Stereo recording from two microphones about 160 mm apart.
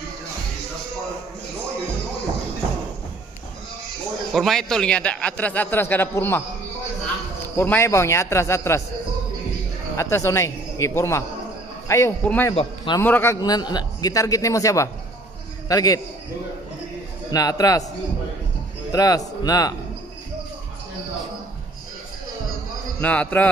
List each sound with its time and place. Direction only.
4.3 s a man's voice: centre (ahead or behind)
7.5 s a man's voice: 15° left (ahead or behind)
9.9 s a man's voice: 20° left (ahead or behind)
12.5 s a man's voice: 30° left (ahead or behind)
13.0 s a man's voice: 15° left (ahead or behind)
17.3 s a man's voice: 25° left (ahead or behind)
18.9 s a man's voice: 25° left (ahead or behind)
22.9 s a man's voice: 10° left (ahead or behind)